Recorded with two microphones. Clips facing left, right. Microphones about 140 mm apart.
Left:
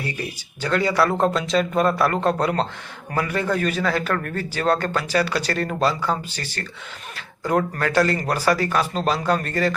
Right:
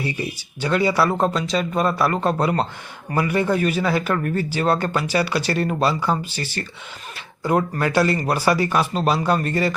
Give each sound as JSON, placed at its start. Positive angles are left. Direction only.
{"t": 0.0, "sound": "a man's voice", "side_deg": -10}